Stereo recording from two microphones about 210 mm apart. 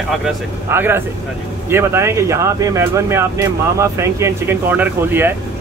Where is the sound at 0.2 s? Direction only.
10° right (ahead or behind).